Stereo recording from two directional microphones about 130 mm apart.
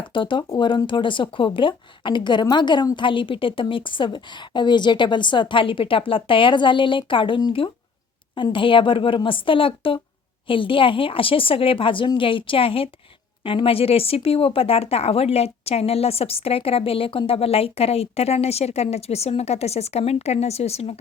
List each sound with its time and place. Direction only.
0.0 s speech: 40° left (ahead or behind)